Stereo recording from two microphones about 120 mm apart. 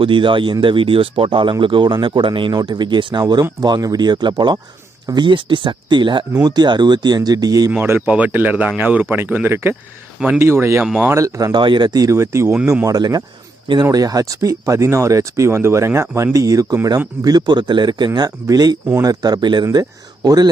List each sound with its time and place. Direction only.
0.0 s speech: 45° right (ahead or behind)
7.7 s speech: 15° right (ahead or behind)
10.8 s speech: 10° right (ahead or behind)
11.1 s speech: 25° right (ahead or behind)
19.6 s speech: 30° right (ahead or behind)